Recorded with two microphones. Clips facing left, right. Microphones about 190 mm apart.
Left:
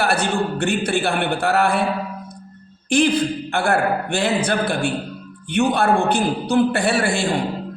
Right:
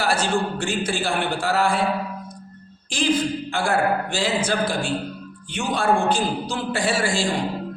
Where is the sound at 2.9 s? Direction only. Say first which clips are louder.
Left 4 dB; 60° left (ahead or behind).